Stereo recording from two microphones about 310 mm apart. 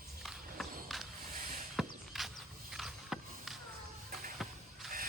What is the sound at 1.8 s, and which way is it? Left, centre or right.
Walk, centre.